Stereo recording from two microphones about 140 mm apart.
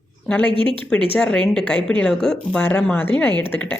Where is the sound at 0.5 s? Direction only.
35° right (ahead or behind).